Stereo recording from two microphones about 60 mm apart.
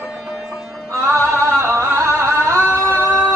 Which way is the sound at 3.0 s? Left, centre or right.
Right.